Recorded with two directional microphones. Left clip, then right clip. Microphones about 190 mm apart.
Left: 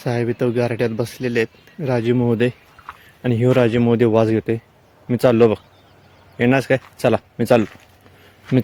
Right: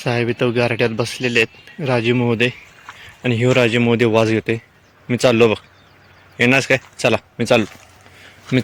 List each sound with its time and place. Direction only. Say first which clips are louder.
0.0 s speech: right 2 dB; 5° left (ahead or behind); by 7.6 s 20° left (ahead or behind)
8.5 s speech: even; 20° right (ahead or behind)